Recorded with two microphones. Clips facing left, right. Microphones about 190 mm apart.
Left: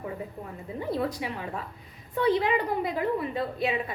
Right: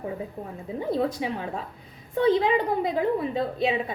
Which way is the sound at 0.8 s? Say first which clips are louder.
Right 4 dB; 25° right (ahead or behind).